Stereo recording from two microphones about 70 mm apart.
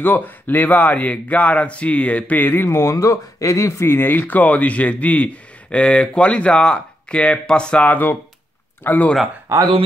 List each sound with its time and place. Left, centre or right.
0.0 s a man's voice: left
3.8 s a man's voice: left
9.5 s speech: right